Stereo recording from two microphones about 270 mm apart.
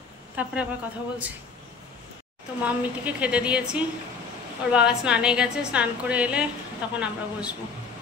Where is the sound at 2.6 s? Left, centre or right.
Centre.